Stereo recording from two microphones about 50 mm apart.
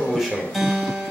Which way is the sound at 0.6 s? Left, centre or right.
Centre.